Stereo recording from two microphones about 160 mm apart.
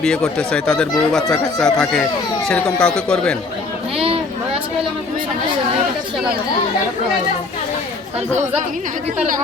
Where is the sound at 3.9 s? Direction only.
35° right (ahead or behind).